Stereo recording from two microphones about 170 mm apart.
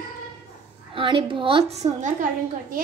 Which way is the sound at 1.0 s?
30° right (ahead or behind).